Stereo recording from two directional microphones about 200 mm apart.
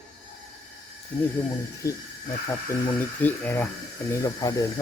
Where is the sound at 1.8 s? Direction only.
15° left (ahead or behind).